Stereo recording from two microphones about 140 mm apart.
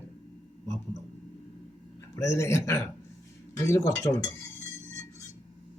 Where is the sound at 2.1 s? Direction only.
20° left (ahead or behind).